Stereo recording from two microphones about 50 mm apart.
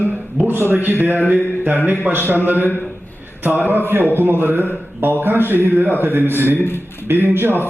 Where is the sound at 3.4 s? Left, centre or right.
Right.